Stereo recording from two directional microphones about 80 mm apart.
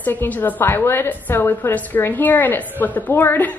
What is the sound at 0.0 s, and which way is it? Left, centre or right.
A woman's voice, left.